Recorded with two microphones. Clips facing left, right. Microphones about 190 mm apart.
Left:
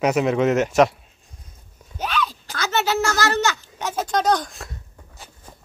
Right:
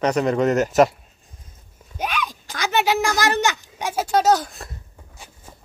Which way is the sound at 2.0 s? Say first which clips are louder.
Left 1 dB; 15° right (ahead or behind).